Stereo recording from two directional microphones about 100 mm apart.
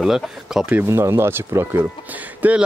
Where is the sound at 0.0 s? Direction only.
5° right (ahead or behind).